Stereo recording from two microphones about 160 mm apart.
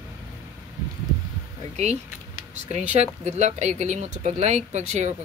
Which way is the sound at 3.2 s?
45° right (ahead or behind).